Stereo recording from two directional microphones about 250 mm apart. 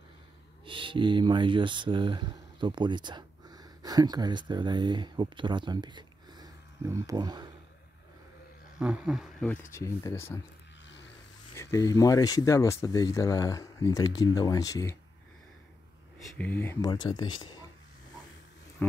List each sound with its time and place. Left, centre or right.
0.7 s speech: centre
8.7 s speech: centre
11.5 s speech: centre
16.3 s speech: centre
18.8 s speech: centre